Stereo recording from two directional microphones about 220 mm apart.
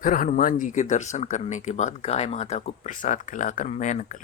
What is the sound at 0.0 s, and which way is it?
Speech, 40° left (ahead or behind).